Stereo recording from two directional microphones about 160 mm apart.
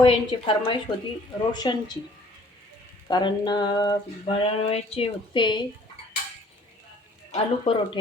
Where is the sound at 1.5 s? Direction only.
25° left (ahead or behind).